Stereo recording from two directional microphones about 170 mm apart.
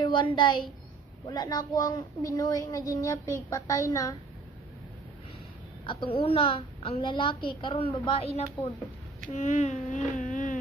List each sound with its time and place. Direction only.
0.0 s a woman's voice: 30° left (ahead or behind)
5.9 s a woman's voice: 30° left (ahead or behind)
9.3 s speech: 45° left (ahead or behind)